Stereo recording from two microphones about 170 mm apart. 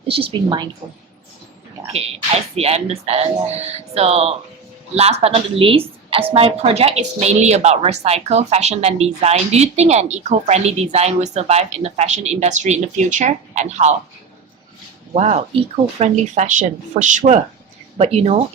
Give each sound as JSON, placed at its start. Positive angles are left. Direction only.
{"t": 0.1, "sound": "a woman's voice", "side_deg": -30}
{"t": 2.6, "sound": "a woman's voice", "side_deg": -35}
{"t": 15.1, "sound": "a woman's voice", "side_deg": -40}